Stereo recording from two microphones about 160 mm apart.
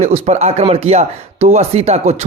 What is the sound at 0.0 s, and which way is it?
A man's voice, 45° right (ahead or behind).